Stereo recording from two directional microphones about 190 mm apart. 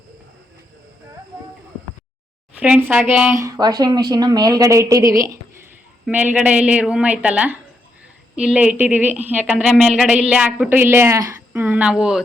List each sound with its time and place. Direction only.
2.6 s a woman's voice: 5° right (ahead or behind)